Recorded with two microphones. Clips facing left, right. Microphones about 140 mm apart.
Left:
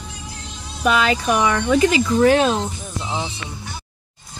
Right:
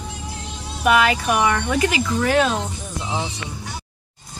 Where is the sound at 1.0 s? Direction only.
30° left (ahead or behind).